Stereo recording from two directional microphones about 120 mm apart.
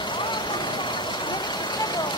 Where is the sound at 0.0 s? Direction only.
40° left (ahead or behind).